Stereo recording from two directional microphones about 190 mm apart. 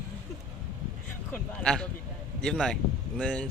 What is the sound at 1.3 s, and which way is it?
Speech, 5° left (ahead or behind).